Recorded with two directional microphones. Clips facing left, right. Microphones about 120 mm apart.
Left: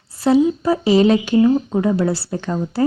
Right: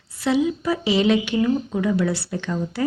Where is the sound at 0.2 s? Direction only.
40° left (ahead or behind).